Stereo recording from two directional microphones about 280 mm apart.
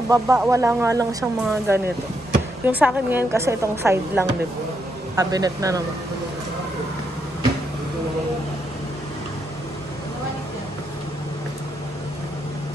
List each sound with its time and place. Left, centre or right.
0.1 s a woman's voice: centre